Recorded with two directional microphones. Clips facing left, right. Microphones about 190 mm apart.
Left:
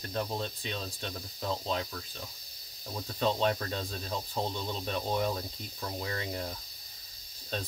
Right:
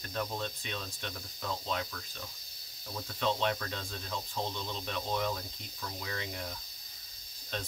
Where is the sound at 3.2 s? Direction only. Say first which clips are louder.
Left 3 dB; 35° left (ahead or behind).